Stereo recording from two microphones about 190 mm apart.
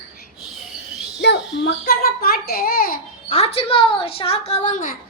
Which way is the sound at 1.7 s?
55° left (ahead or behind).